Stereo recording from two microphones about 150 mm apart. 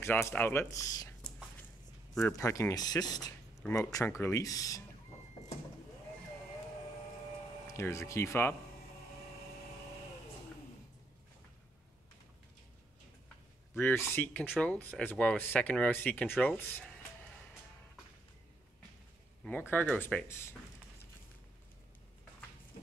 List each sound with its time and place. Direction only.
0.2 s speech: 10° left (ahead or behind)
2.2 s speech: 20° left (ahead or behind)
7.6 s speech: 20° left (ahead or behind)
13.7 s speech: 15° left (ahead or behind)
19.7 s speech: 10° left (ahead or behind)